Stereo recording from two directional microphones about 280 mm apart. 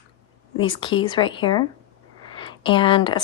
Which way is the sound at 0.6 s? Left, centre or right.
Centre.